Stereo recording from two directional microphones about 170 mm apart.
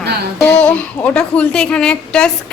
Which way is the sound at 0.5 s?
5° left (ahead or behind).